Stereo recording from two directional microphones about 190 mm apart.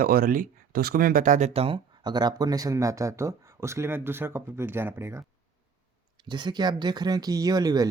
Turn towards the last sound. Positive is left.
turn(degrees=-20)  # may be behind; listen again after turning